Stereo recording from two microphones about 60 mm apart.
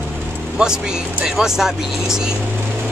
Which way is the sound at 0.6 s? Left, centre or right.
Centre.